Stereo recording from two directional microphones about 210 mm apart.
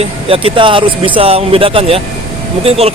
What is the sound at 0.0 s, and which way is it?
Speech, 25° right (ahead or behind).